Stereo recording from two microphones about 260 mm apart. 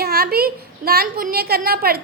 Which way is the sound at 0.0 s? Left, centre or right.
Right.